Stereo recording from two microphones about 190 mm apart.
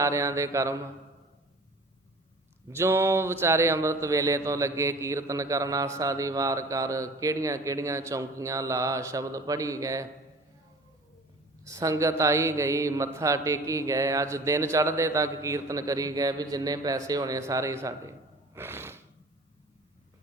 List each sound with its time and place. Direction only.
0.0 s a man's voice: 15° right (ahead or behind)
2.6 s a man's voice: 15° right (ahead or behind)
11.6 s a man's voice: 15° right (ahead or behind)
18.5 s gasp: 10° right (ahead or behind)